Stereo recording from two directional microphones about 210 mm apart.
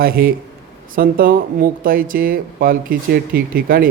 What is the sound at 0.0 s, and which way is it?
Speech, 45° right (ahead or behind).